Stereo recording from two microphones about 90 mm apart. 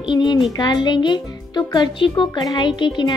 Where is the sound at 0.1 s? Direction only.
60° left (ahead or behind).